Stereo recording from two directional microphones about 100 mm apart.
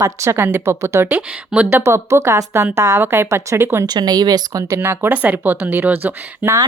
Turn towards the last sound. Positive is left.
turn(degrees=-20)  # may be behind; listen again after turning